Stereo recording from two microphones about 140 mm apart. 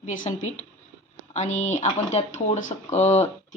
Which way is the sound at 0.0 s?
65° left (ahead or behind).